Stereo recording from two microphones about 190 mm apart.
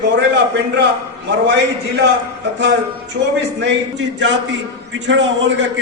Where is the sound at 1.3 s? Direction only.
65° right (ahead or behind).